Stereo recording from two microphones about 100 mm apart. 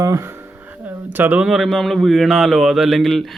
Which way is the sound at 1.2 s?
15° right (ahead or behind).